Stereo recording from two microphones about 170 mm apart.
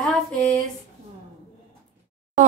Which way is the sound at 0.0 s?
5° left (ahead or behind).